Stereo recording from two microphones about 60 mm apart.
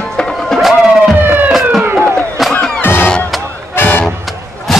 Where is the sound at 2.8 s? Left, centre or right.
Left.